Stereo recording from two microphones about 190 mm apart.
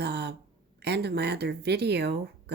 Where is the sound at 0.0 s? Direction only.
60° right (ahead or behind).